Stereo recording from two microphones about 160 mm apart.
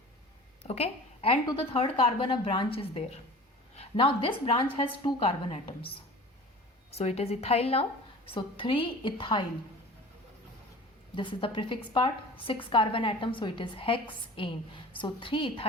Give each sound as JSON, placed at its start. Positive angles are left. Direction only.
{"t": 0.6, "sound": "a woman's voice", "side_deg": 40}
{"t": 7.0, "sound": "a woman's voice", "side_deg": 40}
{"t": 11.1, "sound": "a woman's voice", "side_deg": 30}